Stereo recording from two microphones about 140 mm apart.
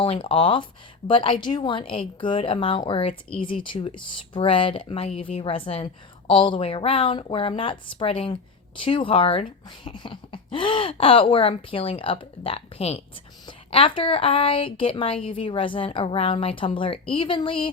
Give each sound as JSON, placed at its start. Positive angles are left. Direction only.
{"t": 0.0, "sound": "speech", "side_deg": 40}